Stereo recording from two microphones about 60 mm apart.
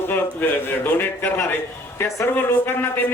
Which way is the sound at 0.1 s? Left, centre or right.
Left.